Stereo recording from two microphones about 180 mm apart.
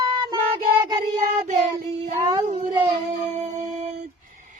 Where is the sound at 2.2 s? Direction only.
20° right (ahead or behind).